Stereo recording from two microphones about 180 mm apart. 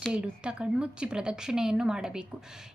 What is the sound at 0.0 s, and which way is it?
A woman's voice, 5° right (ahead or behind).